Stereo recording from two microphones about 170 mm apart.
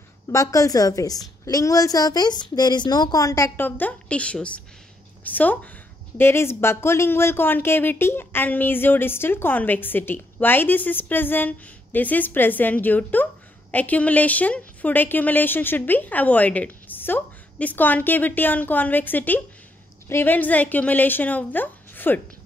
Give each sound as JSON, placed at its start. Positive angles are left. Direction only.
{"t": 0.3, "sound": "a woman's voice", "side_deg": 20}